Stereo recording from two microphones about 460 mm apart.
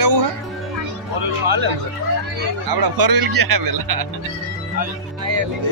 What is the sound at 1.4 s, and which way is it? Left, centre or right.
Speech, right.